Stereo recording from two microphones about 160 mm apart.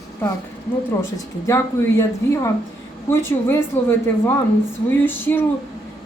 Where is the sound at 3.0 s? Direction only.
15° left (ahead or behind).